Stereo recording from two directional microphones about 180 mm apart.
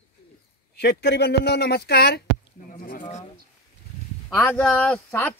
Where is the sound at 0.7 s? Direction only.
70° left (ahead or behind).